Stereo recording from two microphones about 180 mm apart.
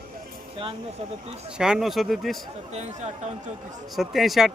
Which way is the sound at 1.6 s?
Centre (ahead or behind).